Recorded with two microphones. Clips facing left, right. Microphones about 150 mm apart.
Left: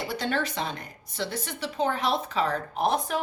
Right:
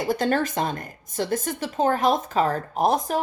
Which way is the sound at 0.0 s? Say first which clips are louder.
Right 6 dB; 45° right (ahead or behind).